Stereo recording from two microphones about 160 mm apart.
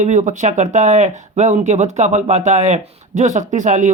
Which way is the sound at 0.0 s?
50° right (ahead or behind).